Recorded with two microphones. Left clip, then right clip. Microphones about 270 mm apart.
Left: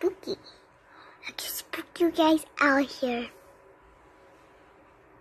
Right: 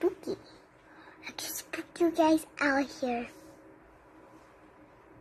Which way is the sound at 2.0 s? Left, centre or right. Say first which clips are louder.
Left 2 dB; centre.